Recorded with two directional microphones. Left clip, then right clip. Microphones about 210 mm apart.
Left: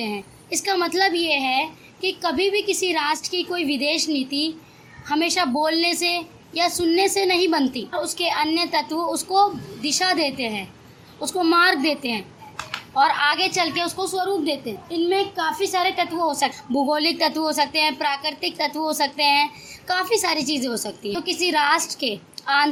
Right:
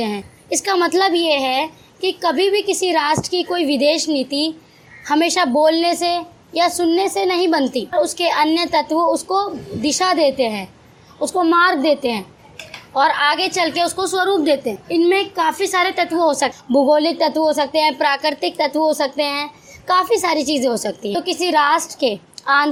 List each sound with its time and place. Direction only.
0.0 s a woman's voice: 20° right (ahead or behind)